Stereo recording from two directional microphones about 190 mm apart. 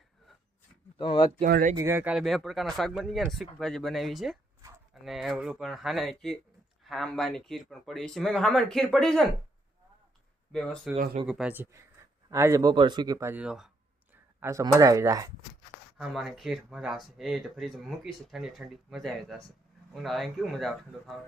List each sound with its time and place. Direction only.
0.9 s speech: 25° left (ahead or behind)
1.5 s speech: 55° right (ahead or behind)
1.7 s speech: 15° right (ahead or behind); by 9.2 s 5° left (ahead or behind)
10.5 s speech: 5° left (ahead or behind)
10.9 s speech: 50° right (ahead or behind)
11.3 s speech: 5° right (ahead or behind)
14.4 s speech: 15° right (ahead or behind)
16.0 s speech: centre (ahead or behind)